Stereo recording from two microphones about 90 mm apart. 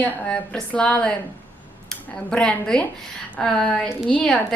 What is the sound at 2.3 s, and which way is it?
A woman's voice, 10° left (ahead or behind).